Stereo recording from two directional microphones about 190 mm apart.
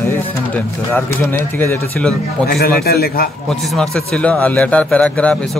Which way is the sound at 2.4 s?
55° left (ahead or behind).